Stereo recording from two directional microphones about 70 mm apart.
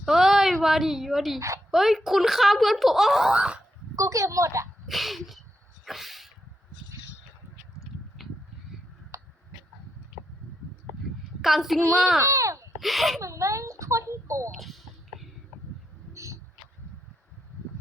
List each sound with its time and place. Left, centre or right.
0.0 s a woman's voice: centre
3.3 s wail: centre
3.9 s a woman's voice: right
4.9 s speech: centre
5.8 s sneeze: centre
9.1 s a sound: right
11.4 s speech: centre
12.2 s speech: right
12.8 s speech: centre
13.1 s a child's voice: right
14.5 s speech: centre
16.1 s a sound: right